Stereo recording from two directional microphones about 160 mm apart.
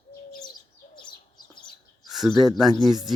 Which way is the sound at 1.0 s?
30° left (ahead or behind).